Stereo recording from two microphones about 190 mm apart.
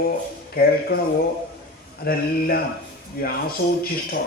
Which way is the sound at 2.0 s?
50° left (ahead or behind).